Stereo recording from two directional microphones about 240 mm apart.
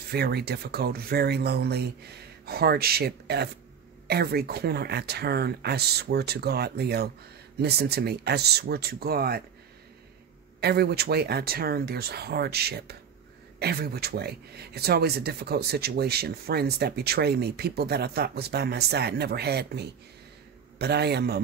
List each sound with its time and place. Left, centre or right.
0.1 s speech: right
10.6 s a man's voice: right